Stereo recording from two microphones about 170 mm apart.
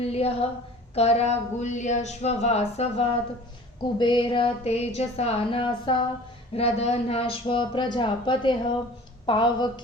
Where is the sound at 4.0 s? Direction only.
30° left (ahead or behind).